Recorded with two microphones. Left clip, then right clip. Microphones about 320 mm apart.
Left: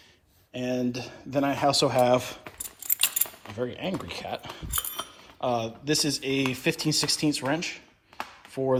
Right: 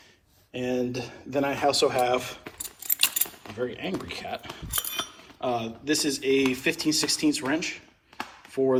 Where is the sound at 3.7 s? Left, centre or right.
Centre.